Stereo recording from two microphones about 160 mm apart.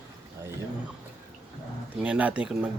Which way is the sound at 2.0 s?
10° right (ahead or behind).